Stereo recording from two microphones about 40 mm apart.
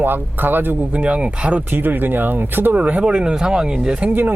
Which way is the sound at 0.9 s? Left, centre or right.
Right.